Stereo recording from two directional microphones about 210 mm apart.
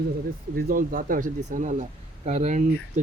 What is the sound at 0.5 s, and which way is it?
Speech, 45° right (ahead or behind).